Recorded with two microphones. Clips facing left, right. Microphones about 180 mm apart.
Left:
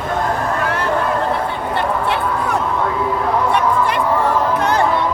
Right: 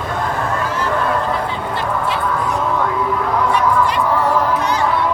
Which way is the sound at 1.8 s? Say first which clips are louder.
Left 2 dB; 65° left (ahead or behind).